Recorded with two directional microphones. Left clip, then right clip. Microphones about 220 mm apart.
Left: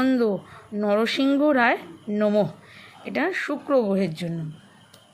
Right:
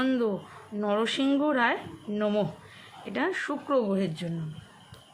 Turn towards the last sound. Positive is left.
turn(degrees=15)  # may be behind; listen again after turning